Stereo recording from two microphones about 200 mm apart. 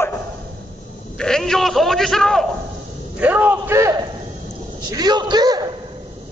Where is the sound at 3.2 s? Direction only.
10° right (ahead or behind).